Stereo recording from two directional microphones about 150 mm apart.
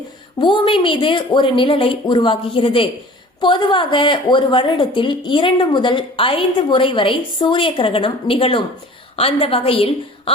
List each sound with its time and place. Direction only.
0.3 s a woman's voice: 30° left (ahead or behind)